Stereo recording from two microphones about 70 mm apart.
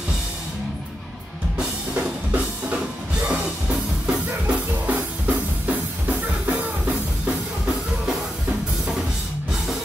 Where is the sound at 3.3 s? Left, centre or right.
Centre.